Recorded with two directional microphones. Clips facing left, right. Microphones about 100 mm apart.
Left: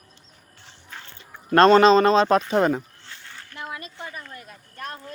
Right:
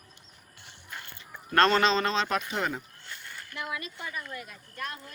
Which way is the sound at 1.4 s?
30° left (ahead or behind).